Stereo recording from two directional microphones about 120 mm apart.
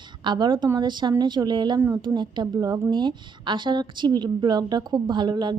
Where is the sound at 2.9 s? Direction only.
40° right (ahead or behind).